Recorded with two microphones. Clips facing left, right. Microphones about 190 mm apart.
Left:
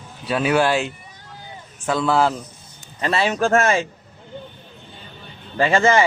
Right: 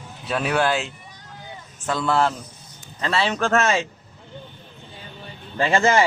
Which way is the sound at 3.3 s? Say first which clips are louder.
Left 4 dB; 45° left (ahead or behind).